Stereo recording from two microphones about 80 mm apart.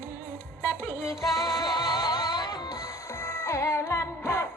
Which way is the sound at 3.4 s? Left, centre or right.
Left.